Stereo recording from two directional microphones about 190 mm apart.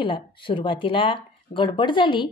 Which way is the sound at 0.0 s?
25° left (ahead or behind).